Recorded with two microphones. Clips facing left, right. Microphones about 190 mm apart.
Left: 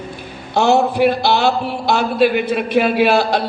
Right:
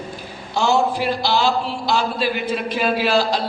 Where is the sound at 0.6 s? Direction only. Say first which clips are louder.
Left 5 dB; 60° left (ahead or behind).